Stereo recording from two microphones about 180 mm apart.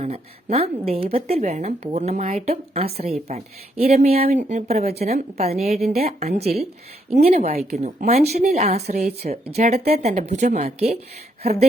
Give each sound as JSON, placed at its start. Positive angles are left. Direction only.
{"t": 0.0, "sound": "speech", "side_deg": -35}